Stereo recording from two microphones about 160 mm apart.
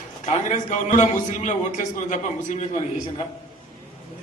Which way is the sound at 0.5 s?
50° left (ahead or behind).